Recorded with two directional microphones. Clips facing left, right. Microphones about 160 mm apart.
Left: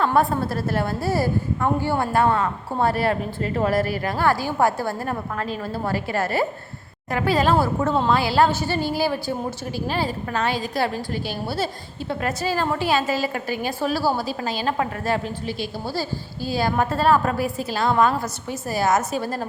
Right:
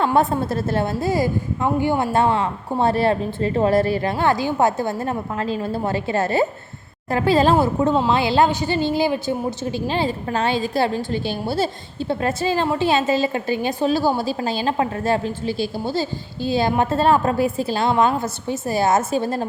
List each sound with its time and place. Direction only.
0.0 s a woman's voice: 20° right (ahead or behind)